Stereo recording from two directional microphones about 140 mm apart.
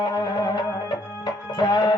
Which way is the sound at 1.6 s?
30° left (ahead or behind).